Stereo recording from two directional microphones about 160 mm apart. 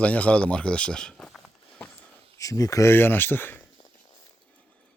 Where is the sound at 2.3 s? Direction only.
20° left (ahead or behind).